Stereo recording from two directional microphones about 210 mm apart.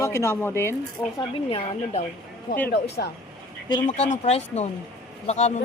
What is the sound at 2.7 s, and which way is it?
Speech, 50° left (ahead or behind).